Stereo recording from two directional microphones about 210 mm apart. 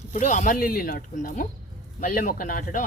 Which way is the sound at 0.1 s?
35° left (ahead or behind).